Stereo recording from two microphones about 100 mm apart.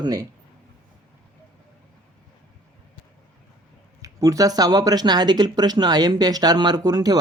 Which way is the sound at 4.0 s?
35° right (ahead or behind).